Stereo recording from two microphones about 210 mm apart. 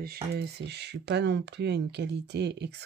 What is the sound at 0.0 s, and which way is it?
Speech, 50° right (ahead or behind).